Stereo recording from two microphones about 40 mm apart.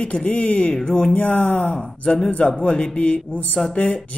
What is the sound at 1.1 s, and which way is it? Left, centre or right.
Speech, left.